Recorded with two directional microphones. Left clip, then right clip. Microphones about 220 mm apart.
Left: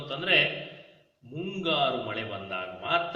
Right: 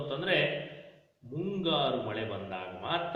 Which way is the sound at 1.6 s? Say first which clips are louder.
Left 3 dB; 15° left (ahead or behind).